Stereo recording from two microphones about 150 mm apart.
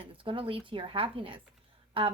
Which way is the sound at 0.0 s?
35° right (ahead or behind).